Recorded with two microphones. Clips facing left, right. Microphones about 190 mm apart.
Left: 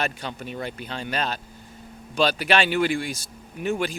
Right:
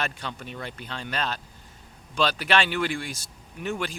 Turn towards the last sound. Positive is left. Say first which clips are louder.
# left 5 dB
turn(degrees=10)  # may be behind; listen again after turning